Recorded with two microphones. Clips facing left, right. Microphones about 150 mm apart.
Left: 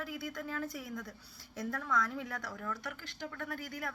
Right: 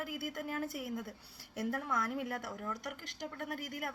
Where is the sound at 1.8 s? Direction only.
25° right (ahead or behind).